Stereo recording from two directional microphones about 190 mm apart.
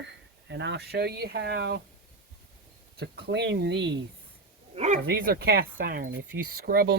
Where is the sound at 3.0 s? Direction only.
60° right (ahead or behind).